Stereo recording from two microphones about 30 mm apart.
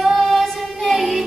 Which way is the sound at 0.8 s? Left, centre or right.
Centre.